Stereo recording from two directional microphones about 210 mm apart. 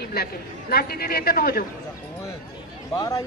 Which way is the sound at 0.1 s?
45° left (ahead or behind).